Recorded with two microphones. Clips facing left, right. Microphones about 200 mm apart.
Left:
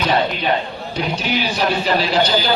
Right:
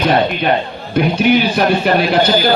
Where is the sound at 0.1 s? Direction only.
60° right (ahead or behind).